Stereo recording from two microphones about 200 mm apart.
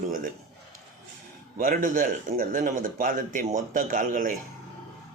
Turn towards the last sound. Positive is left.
turn(degrees=-40)  # may be behind; listen again after turning